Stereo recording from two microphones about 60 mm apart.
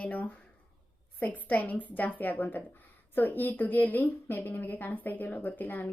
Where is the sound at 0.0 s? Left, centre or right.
Left.